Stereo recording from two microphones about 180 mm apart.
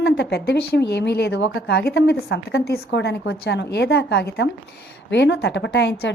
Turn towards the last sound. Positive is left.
turn(degrees=75)  # may be behind; listen again after turning